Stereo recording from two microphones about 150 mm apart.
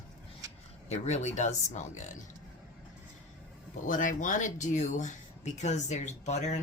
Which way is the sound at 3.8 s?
60° left (ahead or behind).